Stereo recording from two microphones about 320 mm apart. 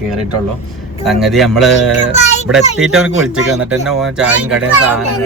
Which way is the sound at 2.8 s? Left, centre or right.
Centre.